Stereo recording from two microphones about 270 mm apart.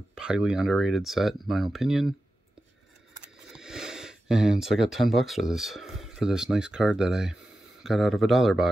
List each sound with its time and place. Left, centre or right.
0.1 s speech: centre
3.5 s speech: centre